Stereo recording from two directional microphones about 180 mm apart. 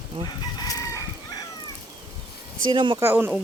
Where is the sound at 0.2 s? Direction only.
30° right (ahead or behind).